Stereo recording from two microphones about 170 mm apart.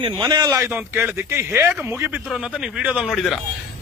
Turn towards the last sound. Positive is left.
turn(degrees=0)  # may be behind; listen again after turning